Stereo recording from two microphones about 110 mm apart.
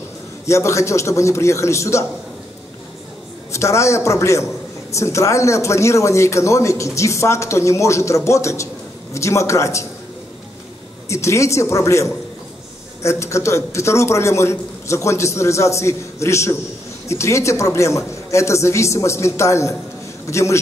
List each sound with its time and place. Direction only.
0.5 s speech: 25° left (ahead or behind)
3.5 s speech: 25° left (ahead or behind)
11.1 s speech: 25° left (ahead or behind)